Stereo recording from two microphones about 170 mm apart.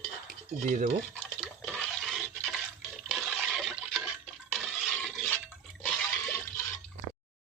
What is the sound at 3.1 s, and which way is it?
Water, centre (ahead or behind).